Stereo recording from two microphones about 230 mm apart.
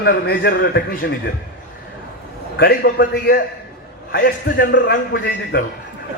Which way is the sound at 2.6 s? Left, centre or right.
Left.